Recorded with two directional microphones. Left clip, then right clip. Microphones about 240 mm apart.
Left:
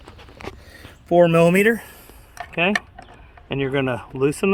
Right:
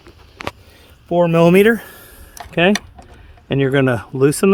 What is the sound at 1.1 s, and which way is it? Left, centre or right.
Speech, right.